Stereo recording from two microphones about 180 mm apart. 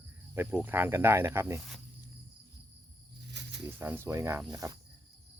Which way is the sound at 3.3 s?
70° right (ahead or behind).